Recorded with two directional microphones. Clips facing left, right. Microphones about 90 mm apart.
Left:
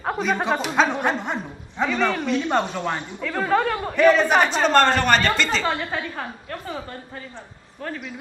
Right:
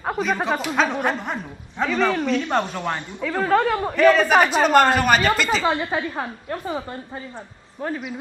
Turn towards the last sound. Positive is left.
turn(degrees=-20)  # may be behind; listen again after turning